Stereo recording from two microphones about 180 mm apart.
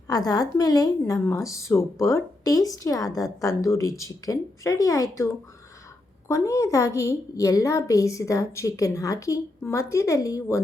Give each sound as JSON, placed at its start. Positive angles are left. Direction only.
{"t": 0.1, "sound": "a woman's voice", "side_deg": 20}